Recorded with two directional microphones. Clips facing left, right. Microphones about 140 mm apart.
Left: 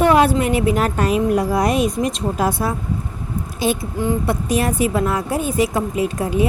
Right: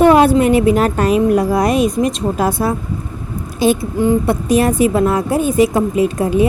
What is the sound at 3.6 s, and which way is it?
Speech, 25° right (ahead or behind).